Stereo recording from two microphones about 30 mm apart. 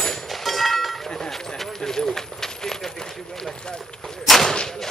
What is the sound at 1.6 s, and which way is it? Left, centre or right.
Clip-clop, centre.